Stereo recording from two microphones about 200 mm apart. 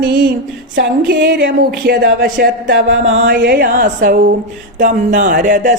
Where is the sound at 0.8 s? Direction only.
55° right (ahead or behind).